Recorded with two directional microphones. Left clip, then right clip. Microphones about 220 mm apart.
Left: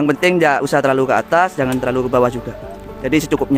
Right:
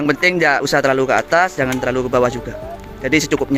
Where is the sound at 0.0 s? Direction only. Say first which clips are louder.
Left 1 dB; 15° left (ahead or behind).